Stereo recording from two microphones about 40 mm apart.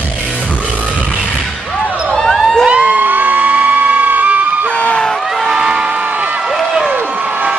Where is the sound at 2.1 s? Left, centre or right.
Centre.